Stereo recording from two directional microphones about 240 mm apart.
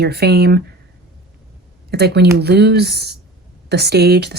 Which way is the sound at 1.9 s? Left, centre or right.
Right.